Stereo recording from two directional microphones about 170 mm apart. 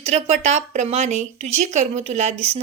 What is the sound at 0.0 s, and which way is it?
A woman's voice, 40° right (ahead or behind).